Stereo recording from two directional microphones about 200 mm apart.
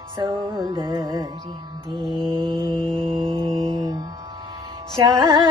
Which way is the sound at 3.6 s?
20° right (ahead or behind).